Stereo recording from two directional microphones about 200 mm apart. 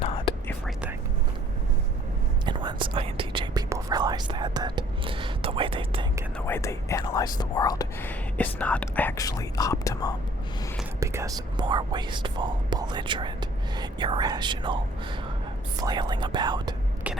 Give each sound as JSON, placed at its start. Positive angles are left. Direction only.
{"t": 0.0, "sound": "whispering", "side_deg": 25}
{"t": 2.5, "sound": "whispering", "side_deg": -20}
{"t": 6.4, "sound": "whispering", "side_deg": 15}
{"t": 11.0, "sound": "whispering", "side_deg": -15}
{"t": 15.8, "sound": "whispering", "side_deg": -20}